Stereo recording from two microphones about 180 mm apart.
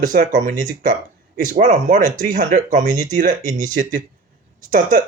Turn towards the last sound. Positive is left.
turn(degrees=-50)  # may be behind; listen again after turning